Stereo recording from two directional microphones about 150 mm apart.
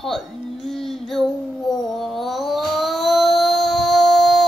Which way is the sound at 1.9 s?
Centre (ahead or behind).